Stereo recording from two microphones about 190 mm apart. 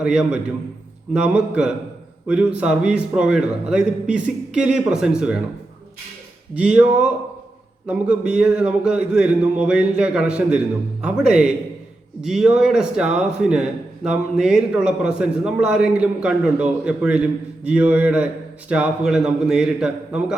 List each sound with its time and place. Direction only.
0.0 s a man's voice: 5° right (ahead or behind)
6.6 s a man's voice: 5° right (ahead or behind)